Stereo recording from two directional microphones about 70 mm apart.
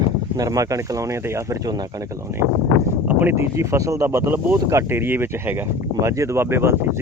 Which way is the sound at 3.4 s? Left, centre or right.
Right.